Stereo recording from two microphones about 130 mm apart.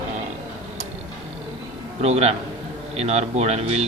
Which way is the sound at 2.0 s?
55° right (ahead or behind).